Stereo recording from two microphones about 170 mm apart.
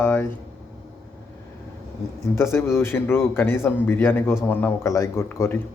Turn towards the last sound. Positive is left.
turn(degrees=15)  # may be behind; listen again after turning